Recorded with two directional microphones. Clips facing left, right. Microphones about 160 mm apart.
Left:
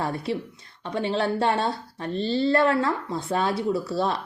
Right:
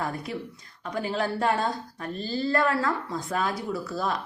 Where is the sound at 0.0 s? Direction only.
30° left (ahead or behind).